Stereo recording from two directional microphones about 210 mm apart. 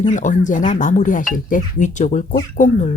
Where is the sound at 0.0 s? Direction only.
35° left (ahead or behind).